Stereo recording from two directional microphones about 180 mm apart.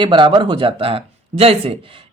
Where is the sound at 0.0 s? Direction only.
25° right (ahead or behind).